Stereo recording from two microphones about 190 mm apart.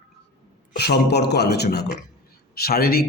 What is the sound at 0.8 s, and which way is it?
Speech, 60° left (ahead or behind).